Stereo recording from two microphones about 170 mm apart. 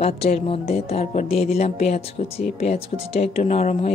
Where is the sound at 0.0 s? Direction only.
40° left (ahead or behind).